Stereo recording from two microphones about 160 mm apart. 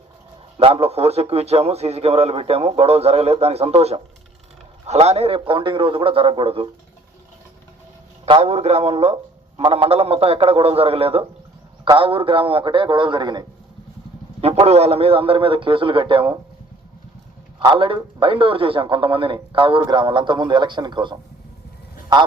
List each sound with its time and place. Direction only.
0.5 s a man's voice: 40° right (ahead or behind)
8.2 s a man's voice: 40° right (ahead or behind)
14.4 s a man's voice: 40° right (ahead or behind)
17.6 s a man's voice: 30° right (ahead or behind)